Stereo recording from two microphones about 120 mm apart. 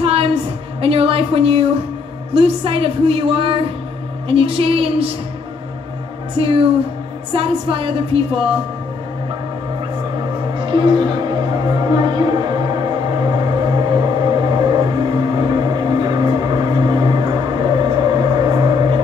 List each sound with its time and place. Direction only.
0.0 s a sound: 55° right (ahead or behind)
2.3 s a woman's voice: 55° right (ahead or behind)
6.3 s a woman's voice: 50° right (ahead or behind)
10.5 s music: 40° right (ahead or behind)